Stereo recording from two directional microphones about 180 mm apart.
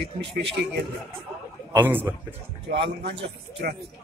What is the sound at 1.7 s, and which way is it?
Speech, 10° right (ahead or behind).